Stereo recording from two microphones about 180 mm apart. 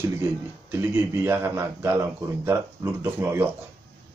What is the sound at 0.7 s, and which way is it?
Speech, 15° right (ahead or behind).